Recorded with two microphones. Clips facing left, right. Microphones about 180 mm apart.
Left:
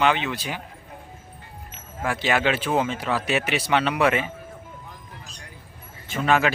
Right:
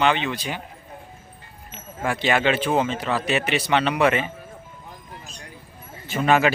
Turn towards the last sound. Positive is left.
turn(degrees=-5)  # may be behind; listen again after turning